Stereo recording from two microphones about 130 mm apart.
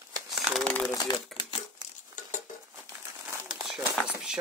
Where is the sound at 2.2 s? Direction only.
75° left (ahead or behind).